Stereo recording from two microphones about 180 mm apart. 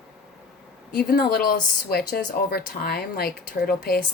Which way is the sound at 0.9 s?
60° left (ahead or behind).